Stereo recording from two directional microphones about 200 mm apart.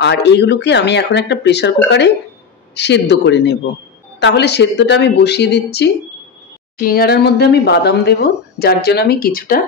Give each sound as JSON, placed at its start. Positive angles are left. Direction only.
{"t": 0.0, "sound": "speech", "side_deg": 60}